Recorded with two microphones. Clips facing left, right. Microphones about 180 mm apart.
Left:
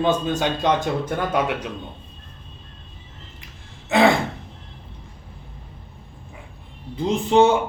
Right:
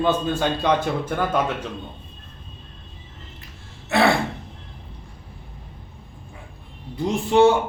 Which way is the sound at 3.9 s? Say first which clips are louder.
Left 2 dB; 15° left (ahead or behind).